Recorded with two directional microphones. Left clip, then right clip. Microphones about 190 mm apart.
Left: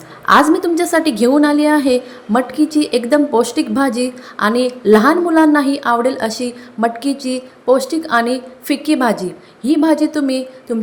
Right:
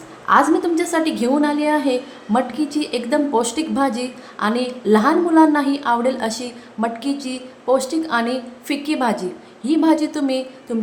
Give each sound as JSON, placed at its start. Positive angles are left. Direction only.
{"t": 0.3, "sound": "a woman's voice", "side_deg": 20}